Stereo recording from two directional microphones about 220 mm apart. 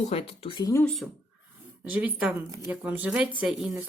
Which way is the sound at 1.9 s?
5° right (ahead or behind).